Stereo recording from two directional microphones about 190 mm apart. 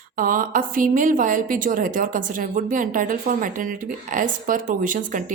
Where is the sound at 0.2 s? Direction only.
45° right (ahead or behind).